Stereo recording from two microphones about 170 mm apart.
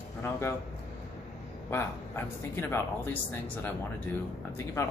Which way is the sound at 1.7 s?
15° left (ahead or behind).